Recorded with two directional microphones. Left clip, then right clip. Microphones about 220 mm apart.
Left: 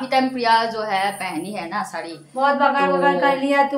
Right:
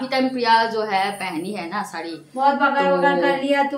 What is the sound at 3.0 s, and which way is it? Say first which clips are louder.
Music: left 1 dB; 20° left (ahead or behind).